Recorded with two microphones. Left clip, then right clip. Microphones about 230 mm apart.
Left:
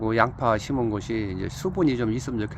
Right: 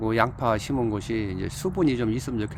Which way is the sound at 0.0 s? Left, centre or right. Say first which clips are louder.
Left 1 dB; centre.